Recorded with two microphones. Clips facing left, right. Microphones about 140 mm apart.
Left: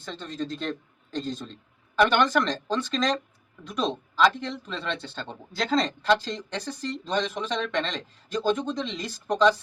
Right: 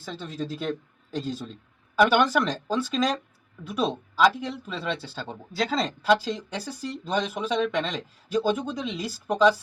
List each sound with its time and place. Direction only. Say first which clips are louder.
0.0 s speech: even; 5° right (ahead or behind)